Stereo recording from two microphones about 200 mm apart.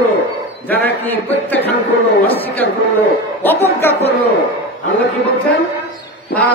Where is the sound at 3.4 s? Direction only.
10° left (ahead or behind).